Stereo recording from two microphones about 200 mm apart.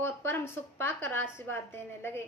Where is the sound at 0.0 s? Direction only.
10° left (ahead or behind).